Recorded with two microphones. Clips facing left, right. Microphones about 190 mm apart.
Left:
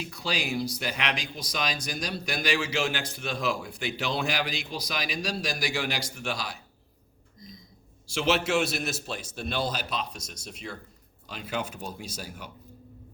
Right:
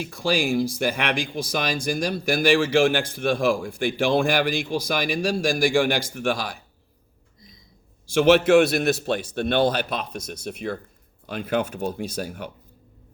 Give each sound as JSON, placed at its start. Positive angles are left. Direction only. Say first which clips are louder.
{"t": 0.1, "sound": "speech", "louder": "right 10 dB", "side_deg": -50}
{"t": 8.1, "sound": "a man's voice", "louder": "right 10 dB", "side_deg": -55}